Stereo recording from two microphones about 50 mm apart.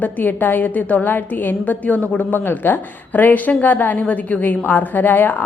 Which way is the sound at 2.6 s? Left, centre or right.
Left.